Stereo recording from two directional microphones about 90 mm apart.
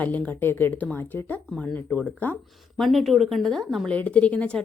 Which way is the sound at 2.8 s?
Centre (ahead or behind).